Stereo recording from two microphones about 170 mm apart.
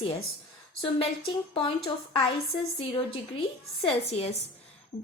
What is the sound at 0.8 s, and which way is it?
Speech, 30° left (ahead or behind).